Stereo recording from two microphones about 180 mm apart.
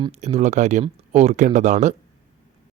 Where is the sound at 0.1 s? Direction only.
35° right (ahead or behind).